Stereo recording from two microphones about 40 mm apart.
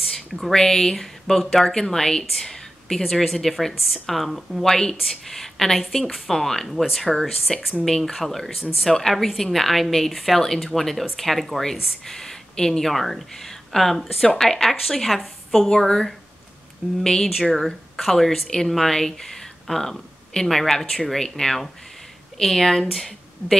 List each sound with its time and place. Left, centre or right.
0.5 s a woman's voice: centre
4.6 s a woman's voice: centre
17.4 s speech: centre